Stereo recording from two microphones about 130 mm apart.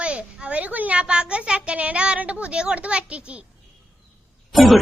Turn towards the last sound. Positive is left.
turn(degrees=0)  # may be behind; listen again after turning